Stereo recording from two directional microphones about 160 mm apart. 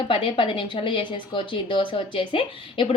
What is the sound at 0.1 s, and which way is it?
Speech, 30° left (ahead or behind).